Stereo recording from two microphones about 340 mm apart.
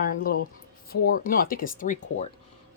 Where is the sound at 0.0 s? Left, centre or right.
Left.